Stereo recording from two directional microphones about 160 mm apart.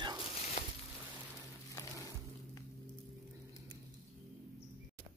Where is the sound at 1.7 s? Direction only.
20° left (ahead or behind).